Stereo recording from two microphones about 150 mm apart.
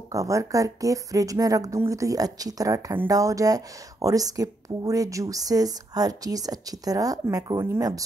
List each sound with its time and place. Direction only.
0.1 s speech: 20° right (ahead or behind)